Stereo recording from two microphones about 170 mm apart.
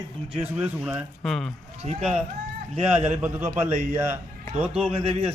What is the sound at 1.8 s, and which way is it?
Speech, 40° right (ahead or behind).